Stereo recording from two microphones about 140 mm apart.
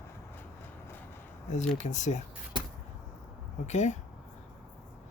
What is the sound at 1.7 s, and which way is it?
Speech, 60° left (ahead or behind).